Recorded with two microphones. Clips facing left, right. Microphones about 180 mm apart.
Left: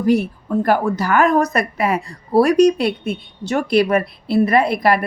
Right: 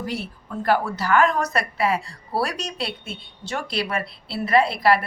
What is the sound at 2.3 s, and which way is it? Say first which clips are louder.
Speech: left 11 dB; 45° left (ahead or behind).